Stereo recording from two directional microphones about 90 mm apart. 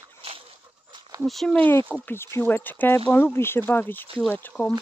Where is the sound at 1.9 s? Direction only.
25° left (ahead or behind).